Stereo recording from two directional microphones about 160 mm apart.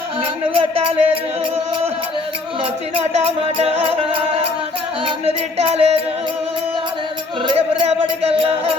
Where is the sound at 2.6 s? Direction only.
35° right (ahead or behind).